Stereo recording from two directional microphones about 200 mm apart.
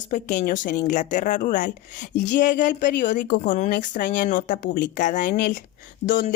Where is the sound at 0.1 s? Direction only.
40° left (ahead or behind).